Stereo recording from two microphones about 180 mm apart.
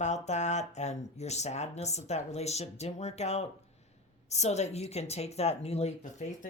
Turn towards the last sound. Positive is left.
turn(degrees=35)  # may be behind; listen again after turning